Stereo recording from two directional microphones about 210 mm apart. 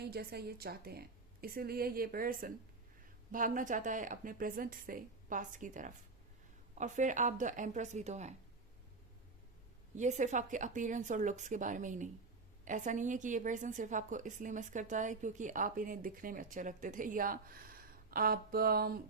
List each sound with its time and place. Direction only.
0.1 s a woman's voice: 50° right (ahead or behind); by 8.4 s 35° right (ahead or behind)
9.9 s a woman's voice: 35° right (ahead or behind)